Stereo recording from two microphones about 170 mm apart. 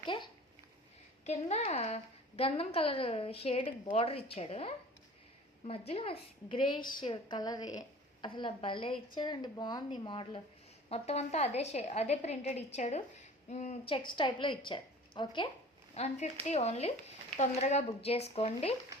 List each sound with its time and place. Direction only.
0.0 s a sound: 25° left (ahead or behind)
1.2 s a woman's voice: 40° left (ahead or behind)
14.2 s a woman's voice: 30° left (ahead or behind)
16.0 s a woman's voice: 40° left (ahead or behind)